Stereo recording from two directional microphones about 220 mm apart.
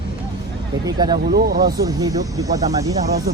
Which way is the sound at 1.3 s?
45° right (ahead or behind).